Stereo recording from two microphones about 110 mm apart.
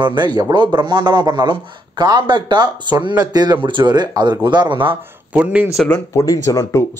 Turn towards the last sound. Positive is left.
turn(degrees=30)  # may be behind; listen again after turning